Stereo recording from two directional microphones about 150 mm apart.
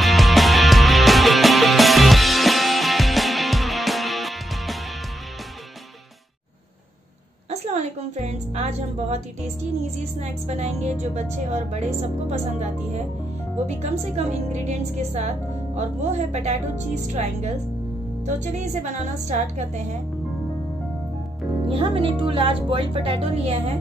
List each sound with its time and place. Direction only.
0.0 s music: centre (ahead or behind)
7.6 s music: 50° right (ahead or behind)
10.2 s a woman's voice: 50° right (ahead or behind)
21.6 s speech: 35° right (ahead or behind)